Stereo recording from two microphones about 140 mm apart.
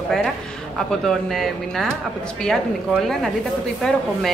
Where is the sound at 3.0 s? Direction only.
5° left (ahead or behind).